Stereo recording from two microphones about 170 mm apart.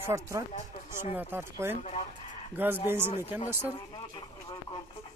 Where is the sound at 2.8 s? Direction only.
15° right (ahead or behind).